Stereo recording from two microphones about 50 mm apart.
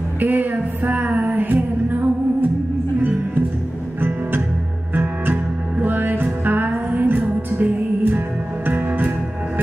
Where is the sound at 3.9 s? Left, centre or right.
Right.